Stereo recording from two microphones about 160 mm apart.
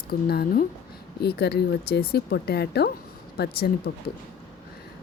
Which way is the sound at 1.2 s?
85° left.